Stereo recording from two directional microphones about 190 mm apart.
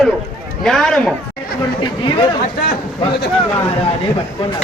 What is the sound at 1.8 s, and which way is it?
Speech, 25° left (ahead or behind).